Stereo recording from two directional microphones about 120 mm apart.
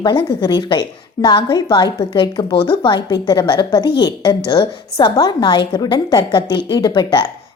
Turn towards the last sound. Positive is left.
turn(degrees=40)  # may be behind; listen again after turning